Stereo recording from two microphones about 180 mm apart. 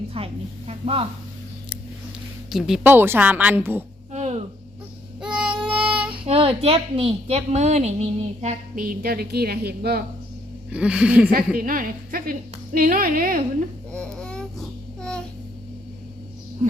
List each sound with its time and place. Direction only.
0.1 s a woman's voice: 30° right (ahead or behind)
2.5 s a woman's voice: centre (ahead or behind)
4.1 s a sound: 40° right (ahead or behind)
5.2 s child singing: 5° right (ahead or behind)
6.2 s a woman's voice: 35° right (ahead or behind)
8.8 s a woman's voice: 55° right (ahead or behind)
10.7 s a woman's voice: 5° right (ahead or behind)
11.3 s a woman's voice: 50° right (ahead or behind)
13.9 s a sound: 5° left (ahead or behind)